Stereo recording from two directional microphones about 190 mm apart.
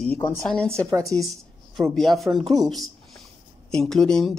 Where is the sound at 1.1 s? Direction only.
20° right (ahead or behind).